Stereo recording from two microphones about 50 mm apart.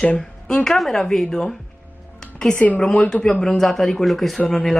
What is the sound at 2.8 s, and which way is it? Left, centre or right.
Speech, centre.